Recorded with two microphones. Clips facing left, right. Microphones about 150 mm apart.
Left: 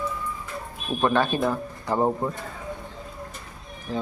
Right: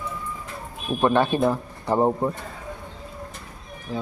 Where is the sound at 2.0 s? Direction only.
10° right (ahead or behind).